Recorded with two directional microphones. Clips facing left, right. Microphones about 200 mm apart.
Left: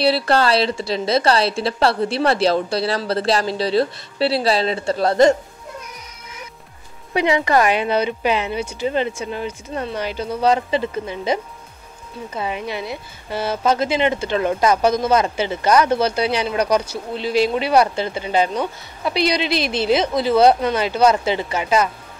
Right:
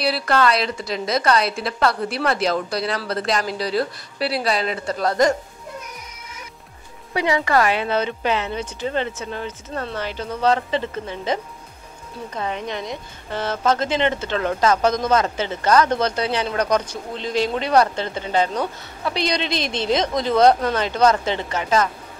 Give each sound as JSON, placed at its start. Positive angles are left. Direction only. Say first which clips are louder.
{"t": 0.0, "sound": "a woman's voice", "louder": "left 3 dB", "side_deg": 30}
{"t": 7.2, "sound": "speech", "louder": "left 2 dB", "side_deg": 20}
{"t": 12.4, "sound": "speech", "louder": "left 2 dB", "side_deg": 10}